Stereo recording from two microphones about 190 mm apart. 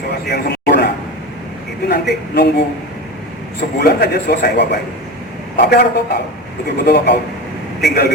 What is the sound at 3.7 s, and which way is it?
A man's voice, 60° left (ahead or behind).